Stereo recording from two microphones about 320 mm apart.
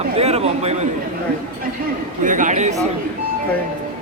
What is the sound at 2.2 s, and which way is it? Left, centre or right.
Speech, right.